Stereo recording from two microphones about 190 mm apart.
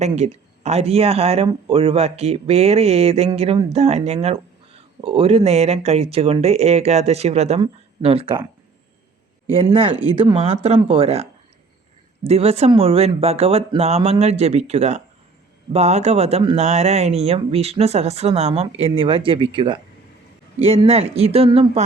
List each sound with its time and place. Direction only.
0.1 s speech: 35° right (ahead or behind)
9.5 s speech: 30° right (ahead or behind)